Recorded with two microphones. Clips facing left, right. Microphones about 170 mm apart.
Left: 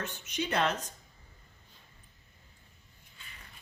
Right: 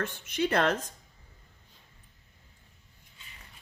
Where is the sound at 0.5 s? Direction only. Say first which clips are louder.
Right 3 dB; 55° right (ahead or behind).